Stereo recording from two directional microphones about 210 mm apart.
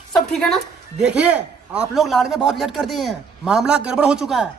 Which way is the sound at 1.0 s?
5° right (ahead or behind).